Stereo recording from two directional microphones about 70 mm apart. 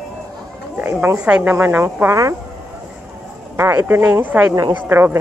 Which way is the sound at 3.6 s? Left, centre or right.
Right.